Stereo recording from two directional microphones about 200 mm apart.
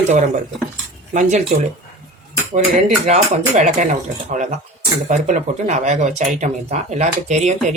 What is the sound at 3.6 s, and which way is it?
Speech, 40° right (ahead or behind).